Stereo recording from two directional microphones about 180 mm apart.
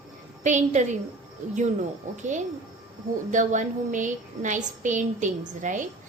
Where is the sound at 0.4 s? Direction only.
40° right (ahead or behind).